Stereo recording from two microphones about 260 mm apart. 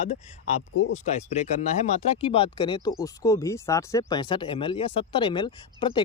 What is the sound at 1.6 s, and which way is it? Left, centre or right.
Speech, left.